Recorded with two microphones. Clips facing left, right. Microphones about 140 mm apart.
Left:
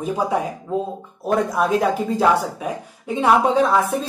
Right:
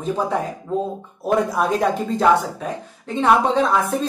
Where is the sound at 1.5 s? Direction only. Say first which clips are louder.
Left 1 dB; centre (ahead or behind).